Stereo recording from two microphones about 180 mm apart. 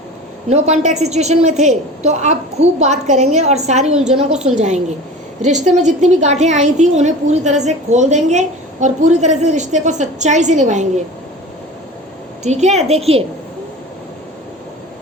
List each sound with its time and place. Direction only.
0.5 s a woman's voice: 40° right (ahead or behind)
12.4 s a woman's voice: 40° right (ahead or behind)